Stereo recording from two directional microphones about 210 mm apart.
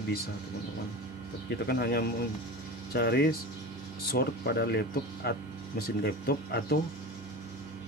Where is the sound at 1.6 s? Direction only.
50° left (ahead or behind).